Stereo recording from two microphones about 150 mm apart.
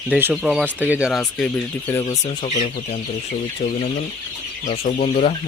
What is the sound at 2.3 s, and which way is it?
Speech, 40° left (ahead or behind).